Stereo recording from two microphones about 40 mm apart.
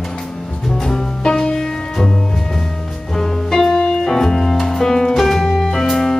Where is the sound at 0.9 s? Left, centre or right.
Centre.